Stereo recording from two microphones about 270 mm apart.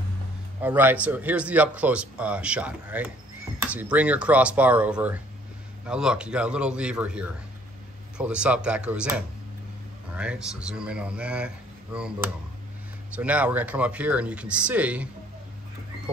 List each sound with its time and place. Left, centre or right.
0.6 s speech: centre